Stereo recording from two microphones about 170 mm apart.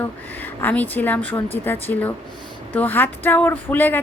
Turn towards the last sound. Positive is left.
turn(degrees=10)  # may be behind; listen again after turning